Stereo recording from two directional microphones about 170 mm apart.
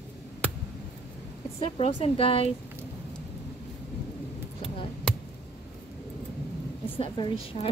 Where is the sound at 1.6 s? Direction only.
35° left (ahead or behind).